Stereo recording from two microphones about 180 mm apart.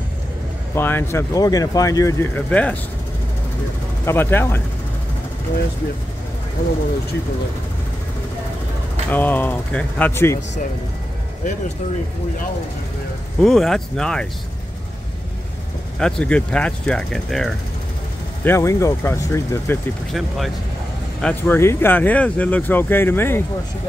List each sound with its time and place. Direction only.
0.7 s speech: 10° left (ahead or behind)
4.0 s speech: 10° left (ahead or behind)
9.1 s speech: 10° left (ahead or behind)
13.4 s speech: centre (ahead or behind)
16.0 s speech: 5° left (ahead or behind)
18.4 s speech: 15° left (ahead or behind)
20.1 s speech: centre (ahead or behind)